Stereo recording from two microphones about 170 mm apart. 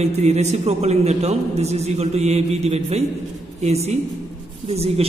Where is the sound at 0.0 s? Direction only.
40° right (ahead or behind).